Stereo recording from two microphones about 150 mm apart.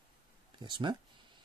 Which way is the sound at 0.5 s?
30° right (ahead or behind).